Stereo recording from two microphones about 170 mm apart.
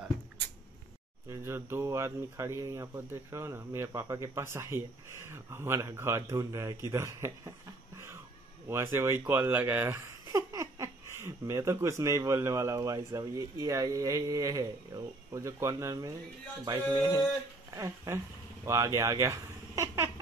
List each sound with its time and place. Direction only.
1.3 s speech: 15° right (ahead or behind)
8.6 s speech: 15° right (ahead or behind)
16.9 s a sound: 20° right (ahead or behind)
17.7 s speech: 15° right (ahead or behind)